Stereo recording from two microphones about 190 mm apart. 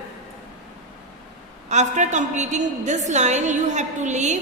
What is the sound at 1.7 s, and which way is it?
A woman's voice, 40° right (ahead or behind).